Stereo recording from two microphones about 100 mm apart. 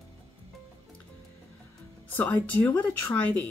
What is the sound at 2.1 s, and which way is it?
A woman's voice, 15° left (ahead or behind).